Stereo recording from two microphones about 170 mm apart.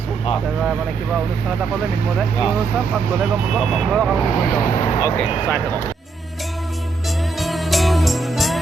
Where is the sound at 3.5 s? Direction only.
5° right (ahead or behind).